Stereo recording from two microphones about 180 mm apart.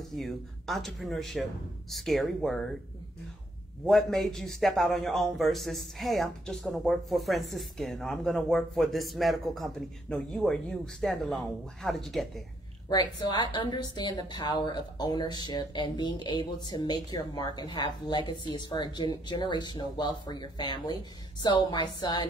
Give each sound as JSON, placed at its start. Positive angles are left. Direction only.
{"t": 0.1, "sound": "speech", "side_deg": 0}
{"t": 3.8, "sound": "speech", "side_deg": 0}
{"t": 12.9, "sound": "a woman's voice", "side_deg": 25}